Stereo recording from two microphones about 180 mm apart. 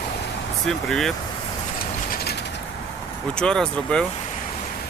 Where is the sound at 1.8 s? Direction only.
55° left (ahead or behind).